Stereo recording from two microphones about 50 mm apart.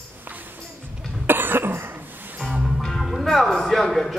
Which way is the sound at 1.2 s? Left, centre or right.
Right.